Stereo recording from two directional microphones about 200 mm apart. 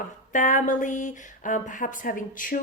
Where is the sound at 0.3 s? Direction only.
40° left (ahead or behind).